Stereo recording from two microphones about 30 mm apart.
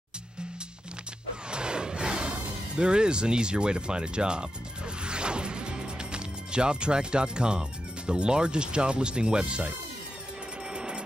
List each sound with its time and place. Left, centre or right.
1.5 s music: right
8.1 s speech: right
10.7 s train: right